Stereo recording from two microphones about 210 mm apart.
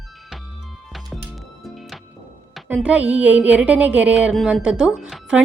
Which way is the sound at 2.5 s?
5° right (ahead or behind).